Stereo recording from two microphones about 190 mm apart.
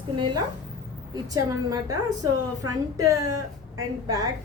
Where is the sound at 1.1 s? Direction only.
20° right (ahead or behind).